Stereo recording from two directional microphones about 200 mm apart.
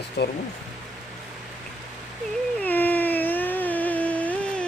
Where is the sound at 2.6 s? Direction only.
10° left (ahead or behind).